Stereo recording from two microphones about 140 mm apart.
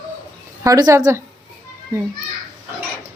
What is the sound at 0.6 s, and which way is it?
Speech, 25° right (ahead or behind).